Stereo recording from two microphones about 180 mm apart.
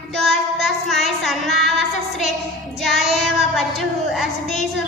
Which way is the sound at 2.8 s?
Centre (ahead or behind).